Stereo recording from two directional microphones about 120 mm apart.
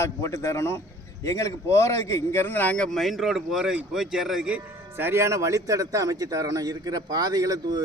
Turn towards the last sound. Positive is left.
turn(degrees=-30)  # may be behind; listen again after turning